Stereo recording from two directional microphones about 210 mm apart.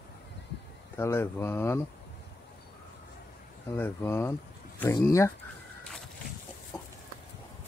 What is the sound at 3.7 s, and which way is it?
Speech, 10° left (ahead or behind).